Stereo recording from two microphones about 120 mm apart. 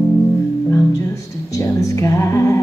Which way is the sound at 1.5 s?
25° left (ahead or behind).